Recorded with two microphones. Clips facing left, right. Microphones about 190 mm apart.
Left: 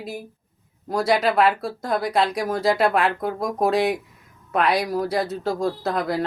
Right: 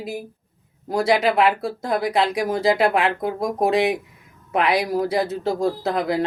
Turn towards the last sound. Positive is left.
turn(degrees=-25)  # may be behind; listen again after turning